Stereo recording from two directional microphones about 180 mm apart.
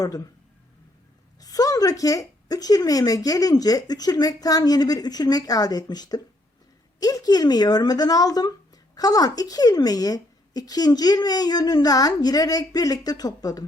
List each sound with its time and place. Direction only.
1.4 s speech: 20° left (ahead or behind)